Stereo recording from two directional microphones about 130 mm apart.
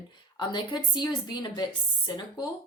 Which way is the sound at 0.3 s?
35° left (ahead or behind).